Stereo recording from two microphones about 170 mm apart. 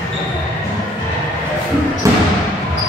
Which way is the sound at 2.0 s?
15° right (ahead or behind).